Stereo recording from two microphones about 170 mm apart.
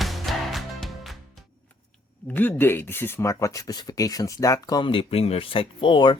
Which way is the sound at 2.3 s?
10° left (ahead or behind).